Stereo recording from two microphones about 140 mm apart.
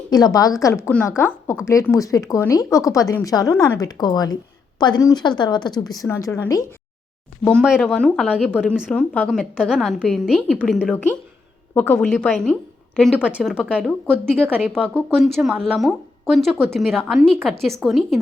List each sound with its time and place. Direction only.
0.1 s a woman's voice: 25° left (ahead or behind)
3.8 s a woman's voice: 30° left (ahead or behind)
7.8 s a woman's voice: 5° left (ahead or behind)
13.1 s a woman's voice: 10° right (ahead or behind)
14.9 s a woman's voice: 5° left (ahead or behind)